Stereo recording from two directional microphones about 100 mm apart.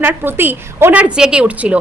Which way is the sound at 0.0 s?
20° right (ahead or behind).